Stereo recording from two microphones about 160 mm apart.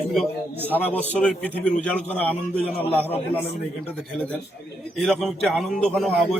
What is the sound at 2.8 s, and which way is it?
Speech, 35° left (ahead or behind).